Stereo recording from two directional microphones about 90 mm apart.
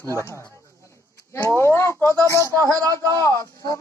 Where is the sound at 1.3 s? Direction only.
25° left (ahead or behind).